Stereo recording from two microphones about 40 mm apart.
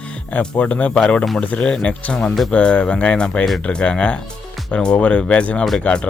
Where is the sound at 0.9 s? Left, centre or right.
Left.